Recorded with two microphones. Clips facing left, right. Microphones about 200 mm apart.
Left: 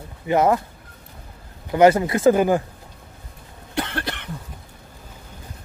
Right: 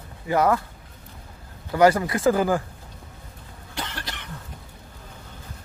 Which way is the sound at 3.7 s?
60° left (ahead or behind).